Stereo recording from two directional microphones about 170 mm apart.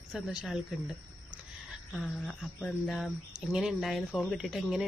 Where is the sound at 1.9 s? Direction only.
Centre (ahead or behind).